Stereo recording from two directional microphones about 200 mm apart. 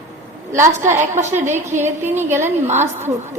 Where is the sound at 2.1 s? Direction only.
10° right (ahead or behind).